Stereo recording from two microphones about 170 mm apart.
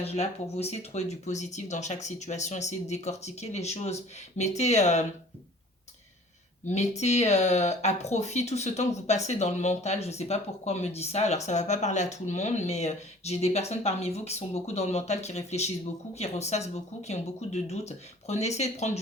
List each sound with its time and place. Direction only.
0.0 s speech: 40° left (ahead or behind)
6.7 s speech: 40° left (ahead or behind)